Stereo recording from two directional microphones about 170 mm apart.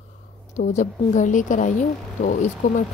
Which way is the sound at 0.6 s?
45° left (ahead or behind).